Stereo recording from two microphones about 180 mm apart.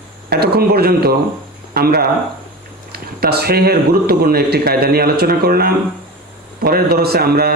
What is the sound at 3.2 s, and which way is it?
Speech, 60° right (ahead or behind).